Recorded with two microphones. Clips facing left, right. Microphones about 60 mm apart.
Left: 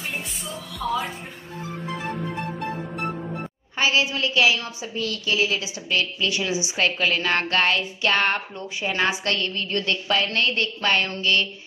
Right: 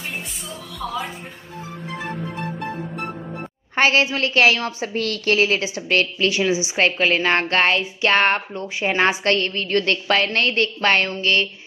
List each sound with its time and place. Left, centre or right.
0.7 s music: centre
3.7 s a woman's voice: right
6.3 s a woman's voice: right